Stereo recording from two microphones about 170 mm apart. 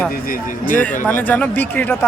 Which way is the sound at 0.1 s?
55° left (ahead or behind).